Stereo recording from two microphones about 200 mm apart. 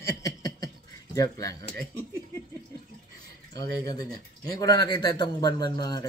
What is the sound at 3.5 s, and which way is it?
A man's voice, 20° left (ahead or behind).